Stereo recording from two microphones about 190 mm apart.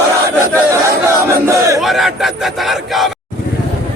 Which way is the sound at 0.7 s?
15° right (ahead or behind).